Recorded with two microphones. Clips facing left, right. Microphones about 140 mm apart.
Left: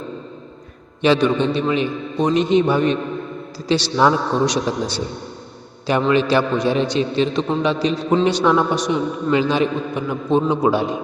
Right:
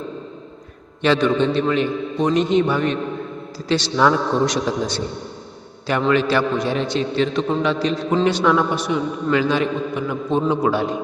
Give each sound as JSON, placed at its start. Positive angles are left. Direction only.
{"t": 1.0, "sound": "a man's voice", "side_deg": 15}
{"t": 6.1, "sound": "a man's voice", "side_deg": 20}